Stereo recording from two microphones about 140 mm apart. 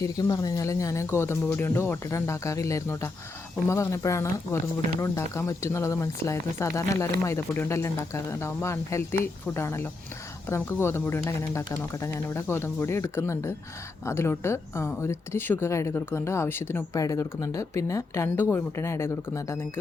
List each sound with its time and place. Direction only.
0.0 s speech: 25° left (ahead or behind)